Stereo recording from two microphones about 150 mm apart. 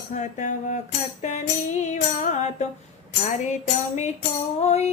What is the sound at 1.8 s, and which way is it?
Music, 55° left (ahead or behind).